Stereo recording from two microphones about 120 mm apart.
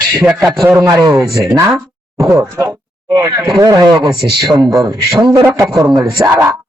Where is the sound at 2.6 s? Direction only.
25° right (ahead or behind).